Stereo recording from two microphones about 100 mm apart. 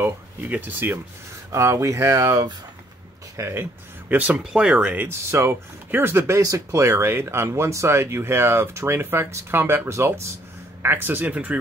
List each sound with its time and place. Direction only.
0.0 s speech: 20° right (ahead or behind)
1.5 s speech: 30° right (ahead or behind)
3.3 s speech: 25° right (ahead or behind)
4.1 s speech: 15° right (ahead or behind)